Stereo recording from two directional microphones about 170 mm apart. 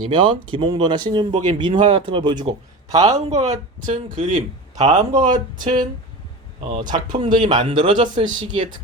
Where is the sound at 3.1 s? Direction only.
40° right (ahead or behind).